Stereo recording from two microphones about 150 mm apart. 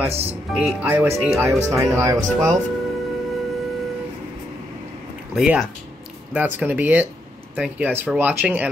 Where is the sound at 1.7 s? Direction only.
20° right (ahead or behind).